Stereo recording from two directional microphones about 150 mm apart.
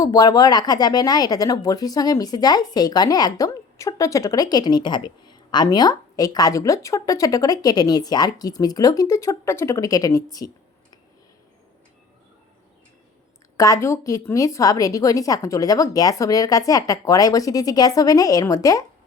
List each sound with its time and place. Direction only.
0.0 s speech: 25° left (ahead or behind)
13.6 s speech: 20° left (ahead or behind)